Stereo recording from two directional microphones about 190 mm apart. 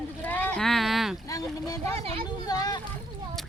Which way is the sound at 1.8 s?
30° right (ahead or behind).